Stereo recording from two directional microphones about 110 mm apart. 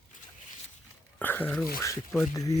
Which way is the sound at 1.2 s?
20° left (ahead or behind).